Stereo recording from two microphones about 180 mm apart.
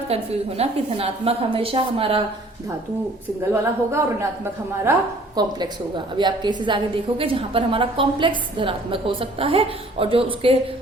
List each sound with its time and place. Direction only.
0.1 s a woman's voice: 35° right (ahead or behind)
3.5 s speech: 15° right (ahead or behind)
5.4 s a woman's voice: 20° right (ahead or behind)